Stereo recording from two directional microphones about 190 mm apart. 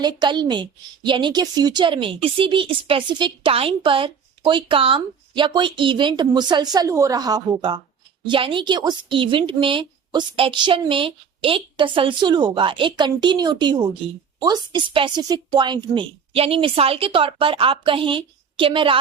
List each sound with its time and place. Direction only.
0.0 s a woman's voice: 25° right (ahead or behind)